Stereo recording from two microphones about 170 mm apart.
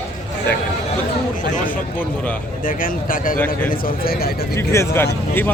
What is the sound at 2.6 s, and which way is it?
Speech, 55° left (ahead or behind).